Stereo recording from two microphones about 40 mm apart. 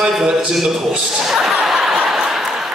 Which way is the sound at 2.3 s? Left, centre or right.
Centre.